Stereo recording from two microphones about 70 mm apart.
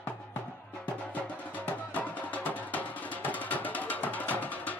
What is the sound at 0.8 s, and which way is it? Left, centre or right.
Music, left.